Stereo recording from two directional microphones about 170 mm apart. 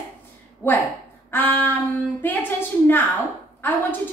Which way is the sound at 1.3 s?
10° left (ahead or behind).